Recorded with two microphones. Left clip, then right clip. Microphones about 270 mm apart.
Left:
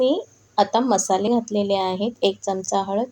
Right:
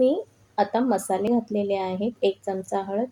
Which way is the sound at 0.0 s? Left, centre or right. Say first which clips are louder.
Left 1 dB; left.